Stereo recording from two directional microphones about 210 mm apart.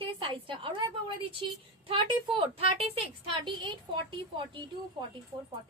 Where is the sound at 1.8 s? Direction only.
25° right (ahead or behind).